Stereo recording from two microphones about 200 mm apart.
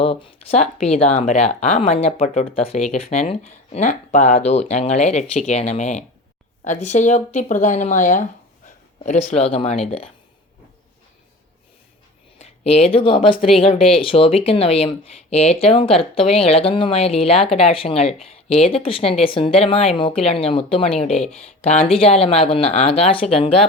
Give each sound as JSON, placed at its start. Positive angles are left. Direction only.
{"t": 0.0, "sound": "speech", "side_deg": 30}
{"t": 12.4, "sound": "speech", "side_deg": 30}